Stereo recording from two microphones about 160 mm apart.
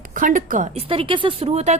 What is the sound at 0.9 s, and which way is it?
Speech, 35° right (ahead or behind).